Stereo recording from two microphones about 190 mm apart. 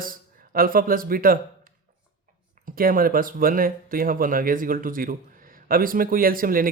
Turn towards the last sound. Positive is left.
turn(degrees=-50)  # may be behind; listen again after turning